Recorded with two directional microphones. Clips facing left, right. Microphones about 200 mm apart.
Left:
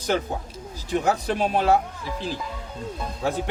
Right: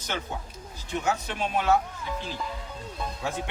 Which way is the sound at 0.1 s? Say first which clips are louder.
Left 6 dB; 40° left (ahead or behind).